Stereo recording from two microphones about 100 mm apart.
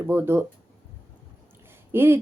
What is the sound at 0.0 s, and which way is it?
Speech, 25° right (ahead or behind).